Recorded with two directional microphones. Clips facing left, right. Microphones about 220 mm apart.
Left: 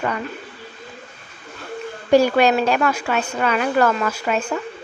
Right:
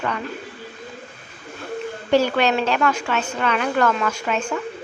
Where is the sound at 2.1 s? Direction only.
10° left (ahead or behind).